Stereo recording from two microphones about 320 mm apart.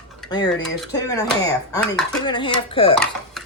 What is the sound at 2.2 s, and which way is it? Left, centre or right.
Speech, centre.